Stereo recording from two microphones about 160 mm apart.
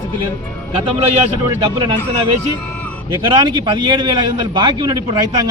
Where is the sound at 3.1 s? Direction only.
30° right (ahead or behind).